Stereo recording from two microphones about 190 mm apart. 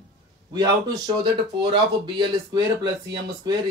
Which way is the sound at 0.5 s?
20° right (ahead or behind).